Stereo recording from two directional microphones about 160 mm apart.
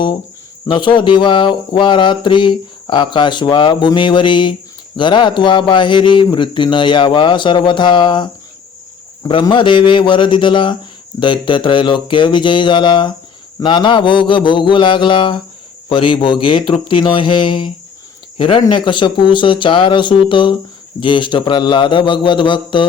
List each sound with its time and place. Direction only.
0.7 s mantra: 30° left (ahead or behind)
9.2 s speech: 30° left (ahead or behind)
21.0 s mantra: 30° left (ahead or behind)